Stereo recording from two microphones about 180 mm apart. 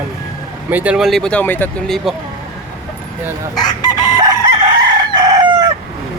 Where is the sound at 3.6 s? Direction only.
20° left (ahead or behind).